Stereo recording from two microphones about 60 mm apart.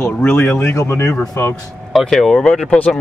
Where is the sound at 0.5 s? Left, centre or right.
Left.